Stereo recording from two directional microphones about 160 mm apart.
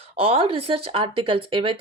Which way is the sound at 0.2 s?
40° right (ahead or behind).